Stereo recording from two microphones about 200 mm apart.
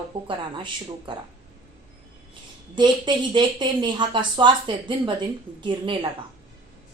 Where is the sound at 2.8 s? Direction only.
20° right (ahead or behind).